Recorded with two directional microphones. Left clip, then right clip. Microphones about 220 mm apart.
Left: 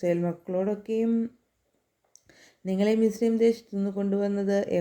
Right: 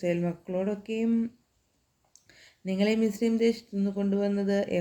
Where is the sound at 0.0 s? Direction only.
15° left (ahead or behind).